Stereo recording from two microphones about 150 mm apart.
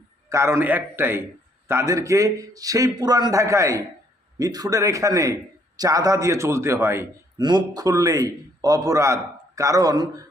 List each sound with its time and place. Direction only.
0.3 s a man's voice: 20° right (ahead or behind)